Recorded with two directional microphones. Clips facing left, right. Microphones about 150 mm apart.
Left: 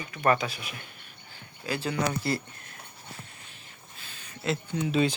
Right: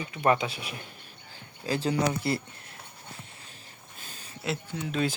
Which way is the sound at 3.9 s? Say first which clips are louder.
Right 2 dB; 40° right (ahead or behind).